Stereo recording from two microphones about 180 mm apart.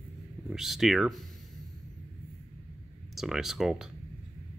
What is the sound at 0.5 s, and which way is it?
Speech, centre (ahead or behind).